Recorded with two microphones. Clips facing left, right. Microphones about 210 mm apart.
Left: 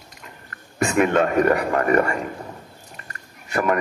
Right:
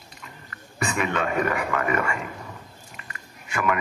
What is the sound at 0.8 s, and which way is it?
A man's voice, 45° left (ahead or behind).